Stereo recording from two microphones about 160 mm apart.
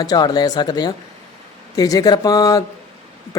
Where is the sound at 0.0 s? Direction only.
25° left (ahead or behind).